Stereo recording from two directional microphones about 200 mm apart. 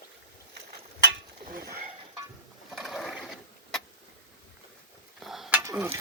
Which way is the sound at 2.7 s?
Centre (ahead or behind).